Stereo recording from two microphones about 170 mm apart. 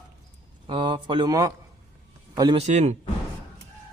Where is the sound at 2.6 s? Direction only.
40° right (ahead or behind).